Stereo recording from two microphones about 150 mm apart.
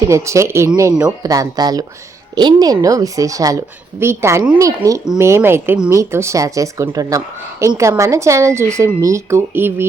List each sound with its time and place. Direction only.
0.1 s a woman's voice: 20° right (ahead or behind)